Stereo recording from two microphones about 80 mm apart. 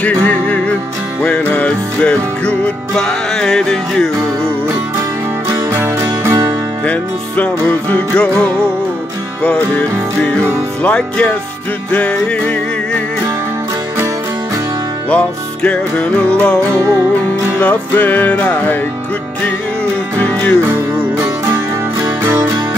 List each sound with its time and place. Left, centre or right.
0.0 s music: centre
5.5 s music: right
6.9 s music: centre
15.0 s music: centre
20.2 s music: left
20.7 s music: right